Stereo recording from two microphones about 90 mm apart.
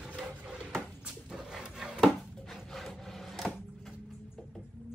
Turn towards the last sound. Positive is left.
turn(degrees=5)  # may be behind; listen again after turning